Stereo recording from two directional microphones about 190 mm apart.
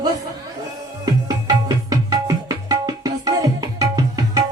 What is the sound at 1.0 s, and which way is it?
Tabla, 20° right (ahead or behind).